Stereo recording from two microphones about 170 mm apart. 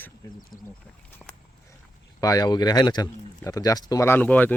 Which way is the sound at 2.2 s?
20° left (ahead or behind).